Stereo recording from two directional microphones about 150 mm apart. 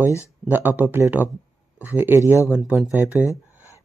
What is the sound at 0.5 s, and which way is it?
Speech, 10° right (ahead or behind).